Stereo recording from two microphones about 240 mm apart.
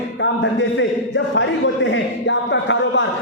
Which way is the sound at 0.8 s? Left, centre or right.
Left.